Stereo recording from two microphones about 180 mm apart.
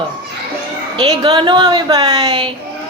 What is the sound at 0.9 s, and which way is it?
A woman's voice, 20° right (ahead or behind).